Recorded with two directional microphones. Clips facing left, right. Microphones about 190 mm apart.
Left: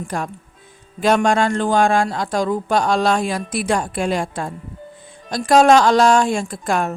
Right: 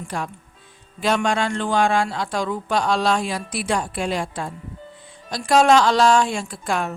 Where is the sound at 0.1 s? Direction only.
45° left (ahead or behind).